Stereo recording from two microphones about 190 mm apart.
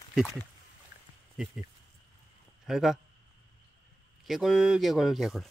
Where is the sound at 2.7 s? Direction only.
Centre (ahead or behind).